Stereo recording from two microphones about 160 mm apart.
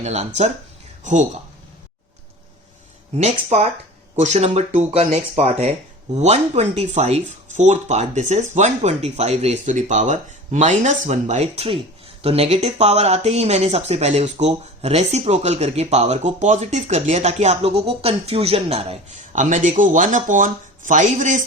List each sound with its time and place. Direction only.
0.0 s speech: 45° right (ahead or behind)
3.2 s speech: 45° right (ahead or behind)